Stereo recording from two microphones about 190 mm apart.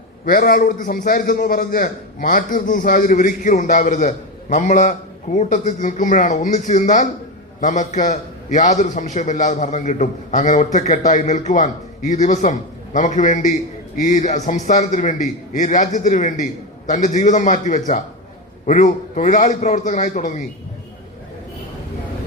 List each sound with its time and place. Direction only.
0.3 s a man's voice: 50° left (ahead or behind)